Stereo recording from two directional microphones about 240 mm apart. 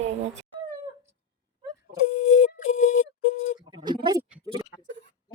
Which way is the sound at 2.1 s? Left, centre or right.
Left.